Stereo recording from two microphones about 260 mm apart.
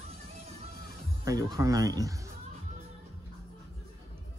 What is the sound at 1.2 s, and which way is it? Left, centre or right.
Speech, centre.